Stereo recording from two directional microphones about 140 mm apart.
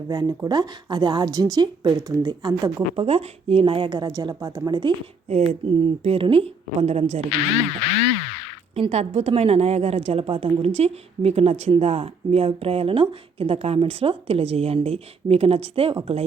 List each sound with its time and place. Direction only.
0.1 s speech: 30° right (ahead or behind)
2.9 s speech: 45° right (ahead or behind)
5.3 s speech: 45° right (ahead or behind)
7.3 s speech: 45° left (ahead or behind)
8.7 s speech: 50° right (ahead or behind)